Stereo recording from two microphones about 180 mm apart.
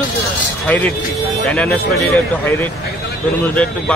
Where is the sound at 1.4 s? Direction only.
5° left (ahead or behind).